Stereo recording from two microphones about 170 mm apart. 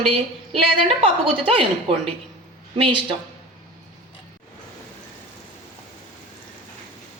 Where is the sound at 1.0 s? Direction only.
30° right (ahead or behind).